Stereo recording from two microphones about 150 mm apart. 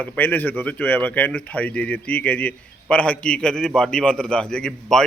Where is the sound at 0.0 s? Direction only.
10° left (ahead or behind).